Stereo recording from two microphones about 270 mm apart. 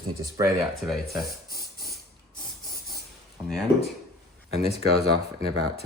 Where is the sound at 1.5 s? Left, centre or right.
Left.